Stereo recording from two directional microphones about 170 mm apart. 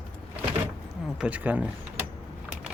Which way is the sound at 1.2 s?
10° right (ahead or behind).